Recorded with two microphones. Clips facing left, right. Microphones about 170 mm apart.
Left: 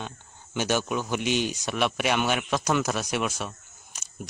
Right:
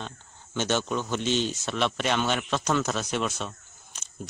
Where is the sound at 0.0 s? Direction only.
10° left (ahead or behind).